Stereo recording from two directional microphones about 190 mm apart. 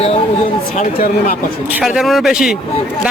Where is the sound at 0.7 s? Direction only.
45° left (ahead or behind).